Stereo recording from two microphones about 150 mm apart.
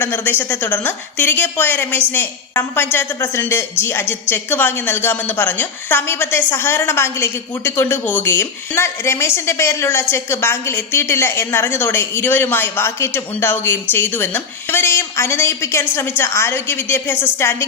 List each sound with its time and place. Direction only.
0.0 s a woman's voice: 15° left (ahead or behind)